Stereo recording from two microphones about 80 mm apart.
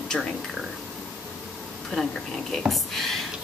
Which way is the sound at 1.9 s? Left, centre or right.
Centre.